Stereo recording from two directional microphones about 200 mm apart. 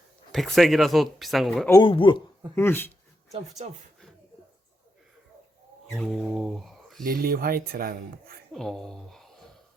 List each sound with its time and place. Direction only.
0.3 s speech: centre (ahead or behind)
1.7 s speech: 25° left (ahead or behind)
2.6 s speech: 10° left (ahead or behind)
6.0 s mantra: centre (ahead or behind)
7.0 s speech: 45° right (ahead or behind)
8.5 s speech: centre (ahead or behind)